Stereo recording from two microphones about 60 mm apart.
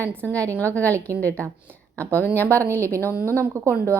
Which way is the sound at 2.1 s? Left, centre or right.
Left.